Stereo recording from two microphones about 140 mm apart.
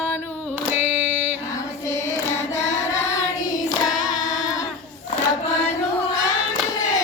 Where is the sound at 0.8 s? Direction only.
15° right (ahead or behind).